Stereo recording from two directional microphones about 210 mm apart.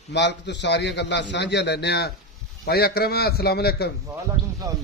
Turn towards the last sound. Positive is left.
turn(degrees=-15)  # may be behind; listen again after turning